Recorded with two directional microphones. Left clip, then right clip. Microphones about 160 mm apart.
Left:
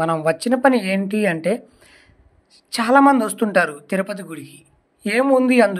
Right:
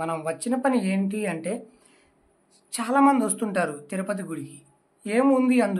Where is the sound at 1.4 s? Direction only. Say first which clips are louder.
Left 10 dB; 35° left (ahead or behind).